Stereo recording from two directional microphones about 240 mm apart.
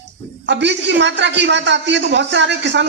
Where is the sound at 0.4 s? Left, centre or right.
Right.